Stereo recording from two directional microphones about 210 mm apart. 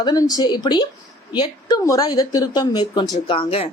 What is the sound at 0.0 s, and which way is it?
A woman's voice, 15° left (ahead or behind).